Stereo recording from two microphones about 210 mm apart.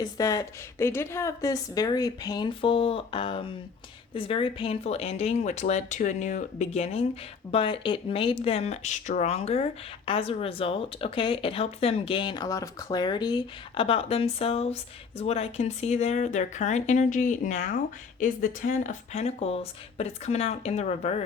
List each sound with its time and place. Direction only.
0.0 s speech: 15° left (ahead or behind); by 21.2 s 35° left (ahead or behind)